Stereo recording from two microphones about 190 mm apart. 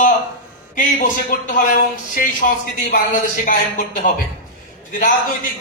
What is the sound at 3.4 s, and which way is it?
Speech, 50° left (ahead or behind).